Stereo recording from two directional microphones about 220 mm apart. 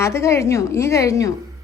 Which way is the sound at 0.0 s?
10° left (ahead or behind).